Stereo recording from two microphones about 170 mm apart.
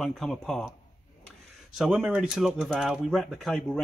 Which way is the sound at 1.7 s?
Centre (ahead or behind).